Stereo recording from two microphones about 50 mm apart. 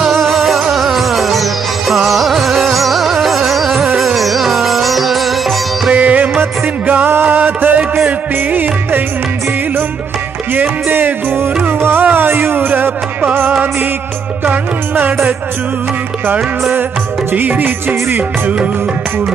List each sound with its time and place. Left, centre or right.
0.3 s music: centre
5.9 s music: right
7.1 s music: right
7.3 s music: right
10.9 s music: right
17.3 s music: right